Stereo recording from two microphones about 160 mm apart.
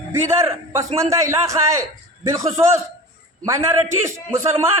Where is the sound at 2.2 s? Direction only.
20° right (ahead or behind).